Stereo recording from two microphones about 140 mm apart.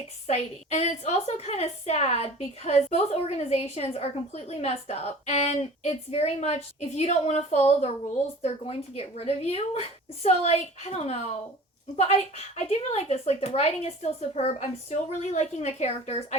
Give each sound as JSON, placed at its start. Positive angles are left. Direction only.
{"t": 0.3, "sound": "a woman's voice", "side_deg": 50}
{"t": 12.5, "sound": "a woman's voice", "side_deg": 50}